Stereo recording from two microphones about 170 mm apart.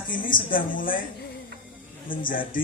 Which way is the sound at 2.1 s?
55° left (ahead or behind).